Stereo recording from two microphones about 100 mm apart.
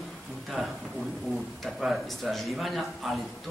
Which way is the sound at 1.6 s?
Centre (ahead or behind).